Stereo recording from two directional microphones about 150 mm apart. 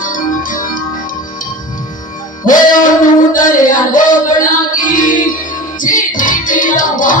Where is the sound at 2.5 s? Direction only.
60° left (ahead or behind).